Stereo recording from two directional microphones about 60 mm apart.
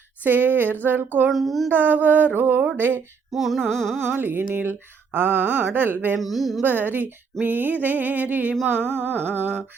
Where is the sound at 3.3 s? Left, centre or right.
Centre.